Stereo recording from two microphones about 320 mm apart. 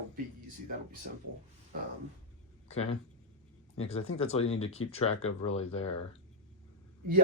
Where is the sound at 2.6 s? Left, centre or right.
Centre.